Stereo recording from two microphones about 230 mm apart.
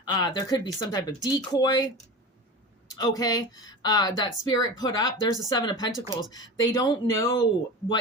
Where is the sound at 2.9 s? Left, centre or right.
Centre.